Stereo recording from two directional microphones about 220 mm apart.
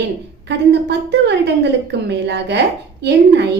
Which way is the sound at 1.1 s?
50° right (ahead or behind).